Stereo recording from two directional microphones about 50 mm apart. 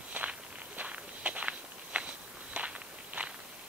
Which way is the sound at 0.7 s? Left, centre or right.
Right.